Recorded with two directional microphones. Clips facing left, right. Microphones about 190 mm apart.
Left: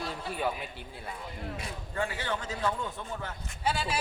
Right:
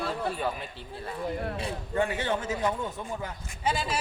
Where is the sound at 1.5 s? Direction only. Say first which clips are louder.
Right 6 dB; 25° right (ahead or behind).